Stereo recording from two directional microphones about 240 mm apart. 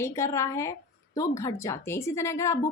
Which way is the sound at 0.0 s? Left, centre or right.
Centre.